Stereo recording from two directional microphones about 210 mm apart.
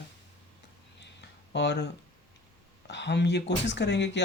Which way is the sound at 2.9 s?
55° left (ahead or behind).